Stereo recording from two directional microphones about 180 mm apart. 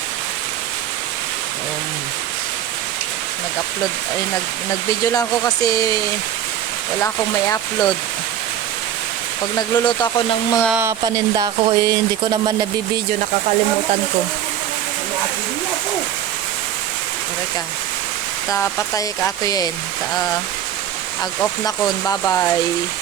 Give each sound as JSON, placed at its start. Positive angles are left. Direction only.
{"t": 5.0, "sound": "speech", "side_deg": 20}
{"t": 7.0, "sound": "speech", "side_deg": 20}
{"t": 9.6, "sound": "speech", "side_deg": 25}
{"t": 10.7, "sound": "speech", "side_deg": -10}
{"t": 11.0, "sound": "speech", "side_deg": -20}
{"t": 18.5, "sound": "speech", "side_deg": 15}
{"t": 21.6, "sound": "speech", "side_deg": 20}